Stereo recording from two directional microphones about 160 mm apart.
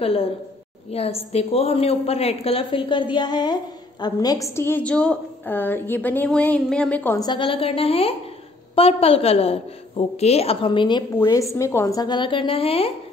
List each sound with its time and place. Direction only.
0.0 s a woman's voice: 35° left (ahead or behind); by 7.2 s 10° left (ahead or behind)
7.2 s a woman's voice: 30° left (ahead or behind)
11.1 s a woman's voice: 20° left (ahead or behind); by 12.9 s 35° left (ahead or behind)